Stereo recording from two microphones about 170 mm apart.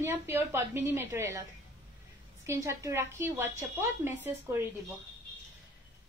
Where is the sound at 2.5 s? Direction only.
20° right (ahead or behind).